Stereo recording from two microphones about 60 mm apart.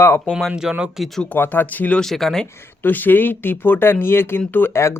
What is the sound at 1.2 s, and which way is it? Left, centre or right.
Speech, left.